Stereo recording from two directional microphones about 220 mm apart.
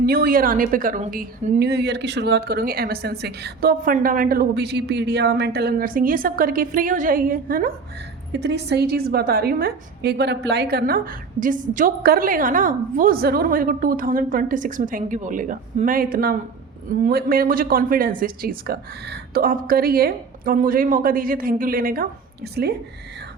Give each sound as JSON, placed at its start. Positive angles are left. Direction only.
{"t": 0.0, "sound": "a woman's voice", "side_deg": -40}
{"t": 8.3, "sound": "a woman's voice", "side_deg": -50}